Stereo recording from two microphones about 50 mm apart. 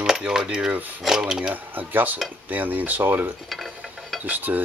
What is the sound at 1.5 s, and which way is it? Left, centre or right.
Speech, right.